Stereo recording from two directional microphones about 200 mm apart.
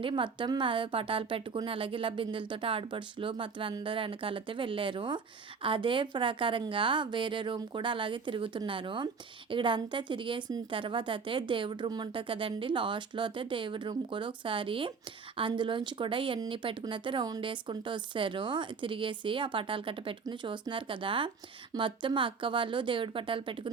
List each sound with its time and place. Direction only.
0.0 s speech: 25° right (ahead or behind)